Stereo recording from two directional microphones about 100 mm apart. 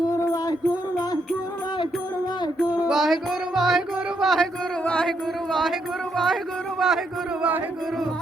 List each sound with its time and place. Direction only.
0.1 s music: 35° left (ahead or behind)
2.8 s music: centre (ahead or behind)
4.8 s music: 15° left (ahead or behind)
5.5 s a man's voice: 5° left (ahead or behind)